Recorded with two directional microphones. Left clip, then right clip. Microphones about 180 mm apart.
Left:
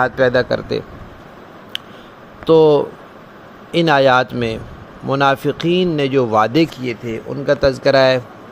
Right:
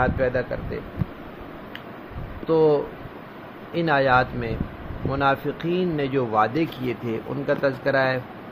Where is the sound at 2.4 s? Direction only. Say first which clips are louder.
Left 8 dB; 55° left (ahead or behind).